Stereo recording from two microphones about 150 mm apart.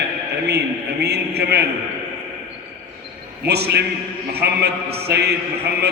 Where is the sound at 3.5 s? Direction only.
90° right.